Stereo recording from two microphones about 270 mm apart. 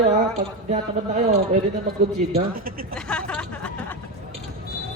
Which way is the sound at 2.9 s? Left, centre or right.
Centre.